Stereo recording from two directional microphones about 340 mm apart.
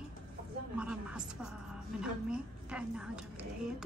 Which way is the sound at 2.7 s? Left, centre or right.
Centre.